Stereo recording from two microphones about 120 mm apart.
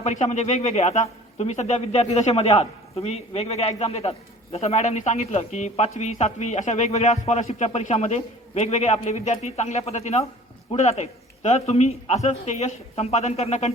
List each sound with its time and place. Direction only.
0.0 s a man's voice: 80° left; by 13.7 s 60° left (ahead or behind)